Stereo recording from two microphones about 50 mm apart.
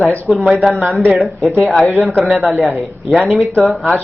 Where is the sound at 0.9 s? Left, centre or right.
Right.